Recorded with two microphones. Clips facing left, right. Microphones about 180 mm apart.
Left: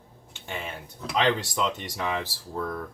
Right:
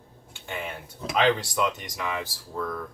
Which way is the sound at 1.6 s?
25° left (ahead or behind).